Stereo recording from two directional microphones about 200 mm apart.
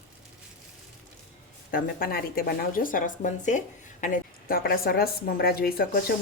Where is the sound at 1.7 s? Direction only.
45° left (ahead or behind).